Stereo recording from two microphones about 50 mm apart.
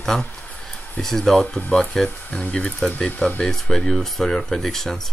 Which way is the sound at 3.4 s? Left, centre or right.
Centre.